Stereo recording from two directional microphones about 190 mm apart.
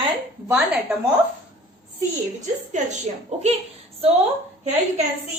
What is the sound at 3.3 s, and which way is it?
Speech, 35° right (ahead or behind).